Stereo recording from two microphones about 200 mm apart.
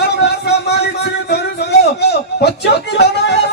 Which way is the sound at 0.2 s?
55° left (ahead or behind).